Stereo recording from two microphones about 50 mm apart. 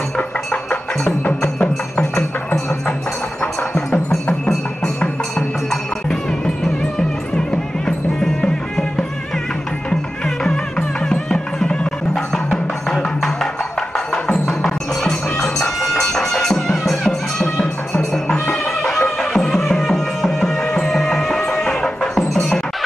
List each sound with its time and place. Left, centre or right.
0.5 s music: centre
4.5 s music: centre
20.6 s music: left
20.9 s music: centre
22.3 s music: centre